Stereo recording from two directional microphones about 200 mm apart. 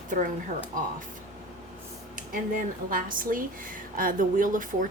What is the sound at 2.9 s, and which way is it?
Speech, 45° right (ahead or behind).